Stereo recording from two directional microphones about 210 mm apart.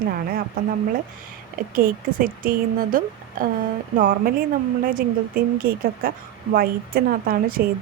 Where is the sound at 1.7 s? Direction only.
45° right (ahead or behind).